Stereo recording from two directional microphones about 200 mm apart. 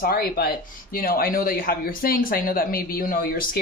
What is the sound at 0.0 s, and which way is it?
Speech, 50° left (ahead or behind).